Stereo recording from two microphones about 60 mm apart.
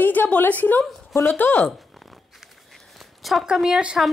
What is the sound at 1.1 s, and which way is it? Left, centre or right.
Speech, left.